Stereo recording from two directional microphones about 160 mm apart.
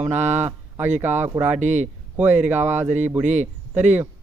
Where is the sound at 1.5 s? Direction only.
50° right (ahead or behind).